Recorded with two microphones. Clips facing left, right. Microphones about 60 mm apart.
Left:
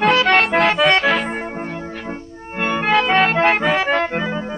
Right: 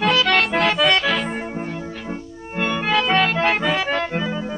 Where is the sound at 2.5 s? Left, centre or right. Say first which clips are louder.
Left 3 dB; left.